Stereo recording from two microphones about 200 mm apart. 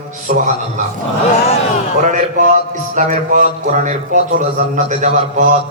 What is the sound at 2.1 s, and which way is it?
Speech, 40° right (ahead or behind).